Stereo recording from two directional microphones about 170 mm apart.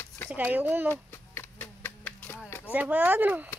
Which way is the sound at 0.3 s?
10° right (ahead or behind).